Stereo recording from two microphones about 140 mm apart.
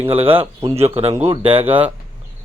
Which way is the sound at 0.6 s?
20° right (ahead or behind).